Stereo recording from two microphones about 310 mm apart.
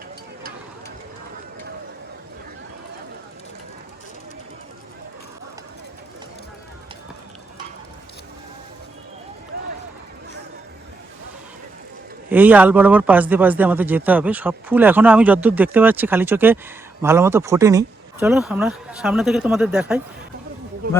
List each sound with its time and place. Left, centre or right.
12.3 s speech: centre